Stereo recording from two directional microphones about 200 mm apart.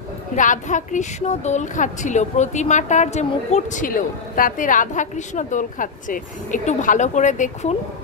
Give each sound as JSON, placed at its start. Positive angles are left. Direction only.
{"t": 0.4, "sound": "a woman's voice", "side_deg": 40}